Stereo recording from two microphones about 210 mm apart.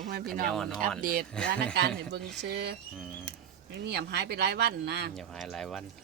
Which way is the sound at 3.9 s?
50° right (ahead or behind).